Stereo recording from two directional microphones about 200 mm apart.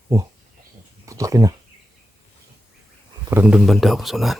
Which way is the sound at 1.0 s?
15° right (ahead or behind).